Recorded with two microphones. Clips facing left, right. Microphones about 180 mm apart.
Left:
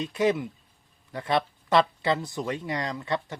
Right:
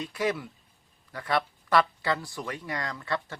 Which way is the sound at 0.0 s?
20° left (ahead or behind).